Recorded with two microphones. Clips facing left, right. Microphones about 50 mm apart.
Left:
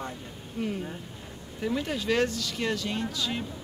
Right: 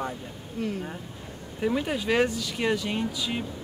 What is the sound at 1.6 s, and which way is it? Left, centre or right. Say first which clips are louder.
Speech: right 3 dB; centre.